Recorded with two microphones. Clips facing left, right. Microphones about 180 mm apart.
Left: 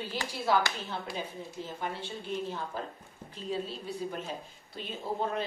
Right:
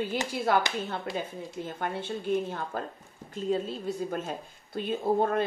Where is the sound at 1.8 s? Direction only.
55° right (ahead or behind).